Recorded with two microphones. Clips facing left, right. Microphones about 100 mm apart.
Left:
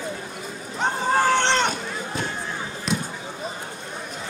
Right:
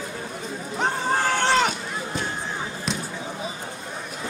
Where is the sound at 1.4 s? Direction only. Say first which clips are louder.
Right 1 dB; 5° right (ahead or behind).